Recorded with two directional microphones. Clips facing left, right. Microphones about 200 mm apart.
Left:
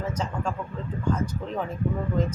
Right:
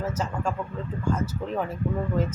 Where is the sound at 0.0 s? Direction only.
5° right (ahead or behind).